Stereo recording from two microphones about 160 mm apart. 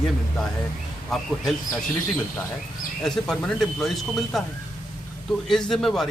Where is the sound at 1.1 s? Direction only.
Centre (ahead or behind).